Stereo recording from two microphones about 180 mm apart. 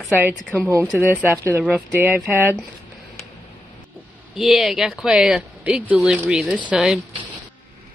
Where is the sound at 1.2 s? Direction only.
15° right (ahead or behind).